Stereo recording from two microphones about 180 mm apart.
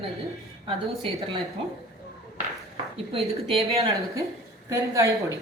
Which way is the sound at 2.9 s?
30° right (ahead or behind).